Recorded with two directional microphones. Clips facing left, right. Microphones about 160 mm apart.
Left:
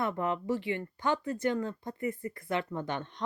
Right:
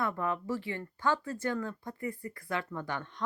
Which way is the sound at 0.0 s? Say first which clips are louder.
Left 2 dB; 20° left (ahead or behind).